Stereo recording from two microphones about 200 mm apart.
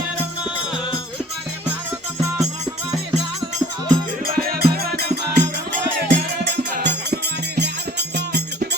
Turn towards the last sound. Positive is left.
turn(degrees=-55)  # may be behind; listen again after turning